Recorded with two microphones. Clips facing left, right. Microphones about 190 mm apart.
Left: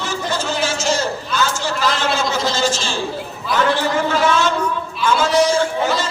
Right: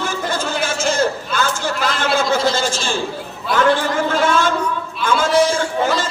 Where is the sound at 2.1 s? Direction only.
55° right (ahead or behind).